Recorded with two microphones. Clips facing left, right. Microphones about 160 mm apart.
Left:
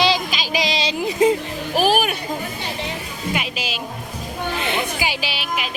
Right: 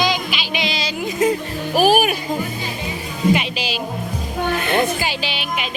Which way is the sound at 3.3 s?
Centre (ahead or behind).